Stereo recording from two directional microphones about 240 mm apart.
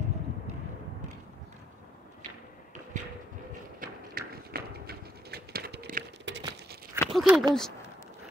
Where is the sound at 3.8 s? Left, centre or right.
Right.